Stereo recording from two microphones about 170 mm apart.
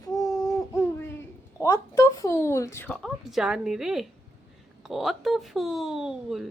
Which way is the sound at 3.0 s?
Centre (ahead or behind).